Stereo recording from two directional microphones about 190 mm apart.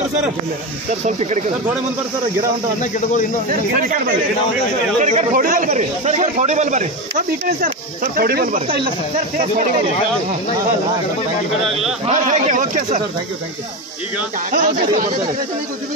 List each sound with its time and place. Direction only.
1.0 s a man's voice: 40° right (ahead or behind)
3.4 s a man's voice: 45° right (ahead or behind)
8.2 s speech: 50° right (ahead or behind)
12.1 s a man's voice: 40° right (ahead or behind)
14.5 s speech: 45° right (ahead or behind)